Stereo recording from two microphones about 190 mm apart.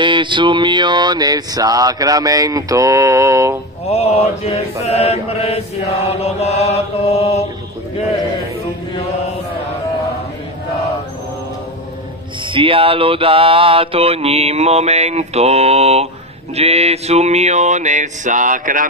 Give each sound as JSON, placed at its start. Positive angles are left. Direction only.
{"t": 0.0, "sound": "a sound", "side_deg": -25}
{"t": 3.9, "sound": "mantra", "side_deg": 35}
{"t": 8.9, "sound": "mantra", "side_deg": 30}
{"t": 12.4, "sound": "mantra", "side_deg": -25}